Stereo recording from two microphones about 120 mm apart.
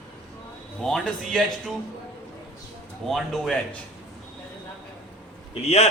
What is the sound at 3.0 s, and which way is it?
Speech, centre (ahead or behind).